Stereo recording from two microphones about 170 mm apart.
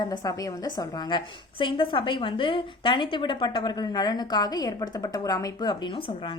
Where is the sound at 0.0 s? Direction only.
25° left (ahead or behind).